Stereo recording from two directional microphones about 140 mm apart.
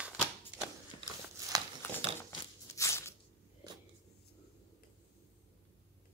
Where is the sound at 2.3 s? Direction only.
25° left (ahead or behind).